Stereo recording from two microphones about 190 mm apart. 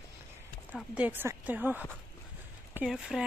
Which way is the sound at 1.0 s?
10° right (ahead or behind).